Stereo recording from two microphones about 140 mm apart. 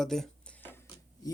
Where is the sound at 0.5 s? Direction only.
15° left (ahead or behind).